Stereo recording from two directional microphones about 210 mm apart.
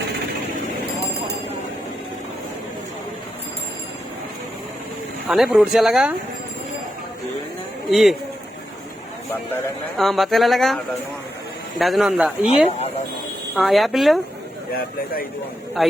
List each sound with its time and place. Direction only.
5.3 s speech: 5° right (ahead or behind)
7.9 s speech: centre (ahead or behind)
10.0 s speech: centre (ahead or behind)
11.8 s speech: centre (ahead or behind)
13.6 s speech: centre (ahead or behind)
14.8 s speech: 45° left (ahead or behind)
15.8 s a man's voice: centre (ahead or behind)